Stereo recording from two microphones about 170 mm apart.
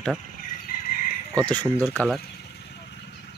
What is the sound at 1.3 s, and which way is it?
Speech, 10° left (ahead or behind).